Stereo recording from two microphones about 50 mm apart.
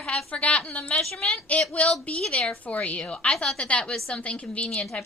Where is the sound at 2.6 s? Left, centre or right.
Left.